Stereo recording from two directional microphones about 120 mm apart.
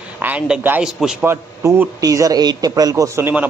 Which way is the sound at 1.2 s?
20° right (ahead or behind).